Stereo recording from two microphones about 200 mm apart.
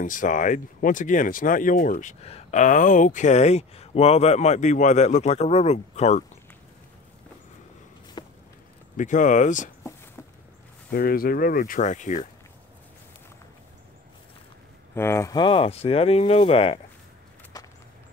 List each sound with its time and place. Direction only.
0.0 s speech: 40° left (ahead or behind)
8.2 s a sound: 20° left (ahead or behind)
8.9 s speech: 40° left (ahead or behind)
10.9 s speech: 50° left (ahead or behind)
15.0 s speech: 10° left (ahead or behind); by 16.8 s 30° left (ahead or behind)
17.5 s a sound: 20° left (ahead or behind)